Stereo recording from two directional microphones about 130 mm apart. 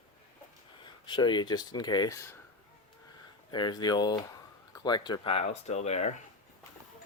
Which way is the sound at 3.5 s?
35° left (ahead or behind).